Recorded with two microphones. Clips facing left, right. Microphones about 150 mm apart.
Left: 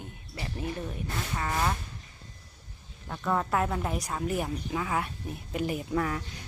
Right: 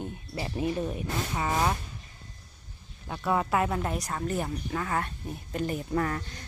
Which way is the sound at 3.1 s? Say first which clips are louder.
Right 1 dB; 5° right (ahead or behind).